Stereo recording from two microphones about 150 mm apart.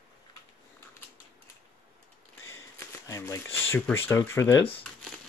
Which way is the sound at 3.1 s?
20° left (ahead or behind).